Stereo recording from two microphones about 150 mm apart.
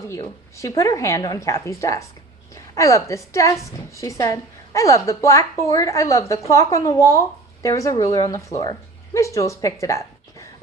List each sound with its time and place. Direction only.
0.1 s a woman's voice: 20° left (ahead or behind)
9.8 s zipper: 20° left (ahead or behind)